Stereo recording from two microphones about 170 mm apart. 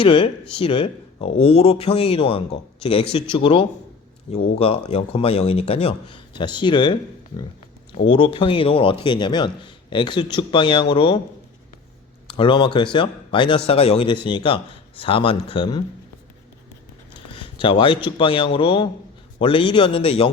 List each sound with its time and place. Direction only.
0.0 s speech: 30° left (ahead or behind)
12.3 s speech: 30° left (ahead or behind)
17.2 s a man's voice: 30° left (ahead or behind)